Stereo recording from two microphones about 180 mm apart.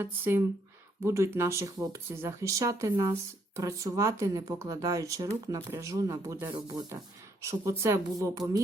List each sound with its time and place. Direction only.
0.0 s speech: 15° right (ahead or behind)